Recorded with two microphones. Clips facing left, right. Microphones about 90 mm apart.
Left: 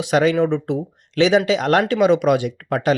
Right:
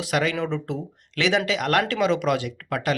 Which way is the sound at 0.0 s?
20° left (ahead or behind).